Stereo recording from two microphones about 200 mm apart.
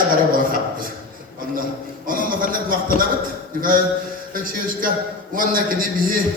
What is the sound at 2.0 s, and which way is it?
Speech, 45° right (ahead or behind).